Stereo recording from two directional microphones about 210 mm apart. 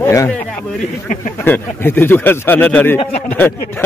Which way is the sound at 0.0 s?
15° left (ahead or behind).